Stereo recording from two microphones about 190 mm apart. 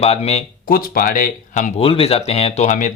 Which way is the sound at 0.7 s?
50° left (ahead or behind).